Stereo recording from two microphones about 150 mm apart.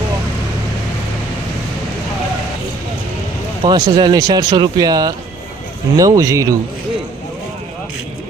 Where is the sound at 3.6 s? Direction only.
30° right (ahead or behind).